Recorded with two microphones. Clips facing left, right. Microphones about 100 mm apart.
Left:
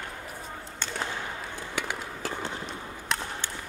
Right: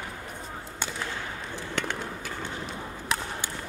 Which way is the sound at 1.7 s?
5° left (ahead or behind).